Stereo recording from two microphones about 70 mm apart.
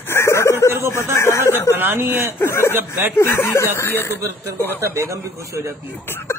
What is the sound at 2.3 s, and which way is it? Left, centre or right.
Speech, left.